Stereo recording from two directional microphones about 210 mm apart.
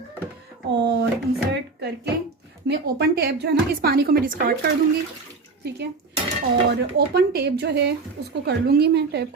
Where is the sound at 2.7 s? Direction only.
50° right (ahead or behind).